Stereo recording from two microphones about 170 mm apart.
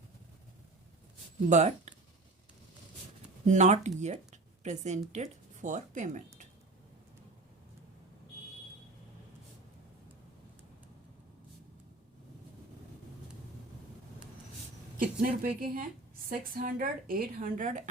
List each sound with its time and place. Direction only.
1.5 s speech: 45° right (ahead or behind)
3.4 s speech: 45° right (ahead or behind)
14.9 s speech: 60° right (ahead or behind)